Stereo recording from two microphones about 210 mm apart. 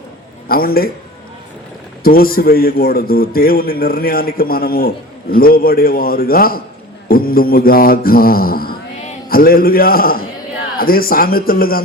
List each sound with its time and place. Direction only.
0.4 s a man's voice: 45° left (ahead or behind)
2.0 s a man's voice: 45° left (ahead or behind)